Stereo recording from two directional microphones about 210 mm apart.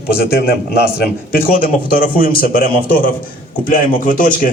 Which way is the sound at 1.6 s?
40° left (ahead or behind).